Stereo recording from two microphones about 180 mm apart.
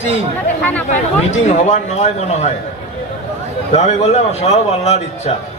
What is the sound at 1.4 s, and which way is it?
A man's voice, 45° left (ahead or behind).